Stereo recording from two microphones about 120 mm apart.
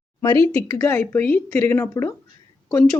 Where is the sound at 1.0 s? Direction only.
15° left (ahead or behind).